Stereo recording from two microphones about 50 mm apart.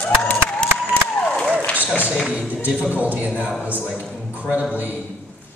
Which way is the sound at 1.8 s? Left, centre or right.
Right.